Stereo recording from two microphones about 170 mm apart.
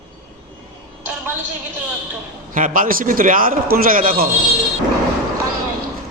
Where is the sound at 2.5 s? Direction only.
55° right (ahead or behind).